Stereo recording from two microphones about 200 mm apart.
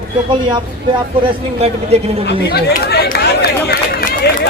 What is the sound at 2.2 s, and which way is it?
Speech, 55° left (ahead or behind).